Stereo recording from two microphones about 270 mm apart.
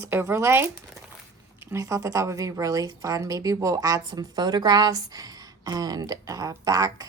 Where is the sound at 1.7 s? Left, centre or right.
Centre.